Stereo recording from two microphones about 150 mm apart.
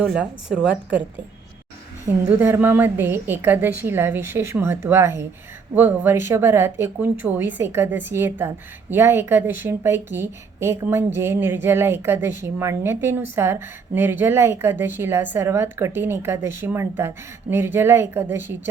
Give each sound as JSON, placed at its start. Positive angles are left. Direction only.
{"t": 0.0, "sound": "speech", "side_deg": -5}
{"t": 2.2, "sound": "speech", "side_deg": -15}